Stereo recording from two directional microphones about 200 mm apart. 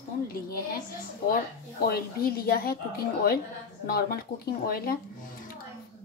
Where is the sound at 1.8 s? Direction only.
50° left (ahead or behind).